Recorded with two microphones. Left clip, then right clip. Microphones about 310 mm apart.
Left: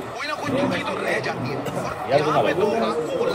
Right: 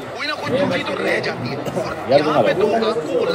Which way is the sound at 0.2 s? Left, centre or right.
Right.